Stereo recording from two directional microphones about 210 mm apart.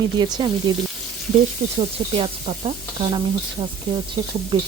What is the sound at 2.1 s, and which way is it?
Speech, 30° right (ahead or behind).